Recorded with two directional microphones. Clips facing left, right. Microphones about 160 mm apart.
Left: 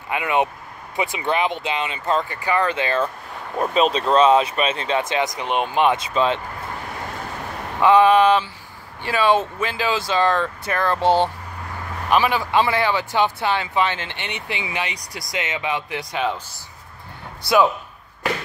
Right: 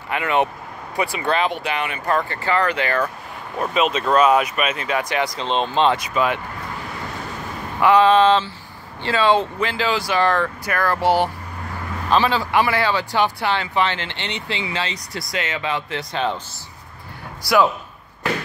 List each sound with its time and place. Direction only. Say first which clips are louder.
0.1 s speech: right 1 dB; 15° left (ahead or behind)
3.7 s speech: left 1 dB; 35° left (ahead or behind); by 5.9 s 15° left (ahead or behind)
5.9 s speech: left 1 dB; 25° left (ahead or behind)
7.8 s speech: even; 20° left (ahead or behind)